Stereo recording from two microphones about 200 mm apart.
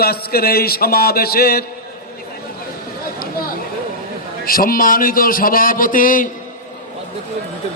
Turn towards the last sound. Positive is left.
turn(degrees=45)  # may be behind; listen again after turning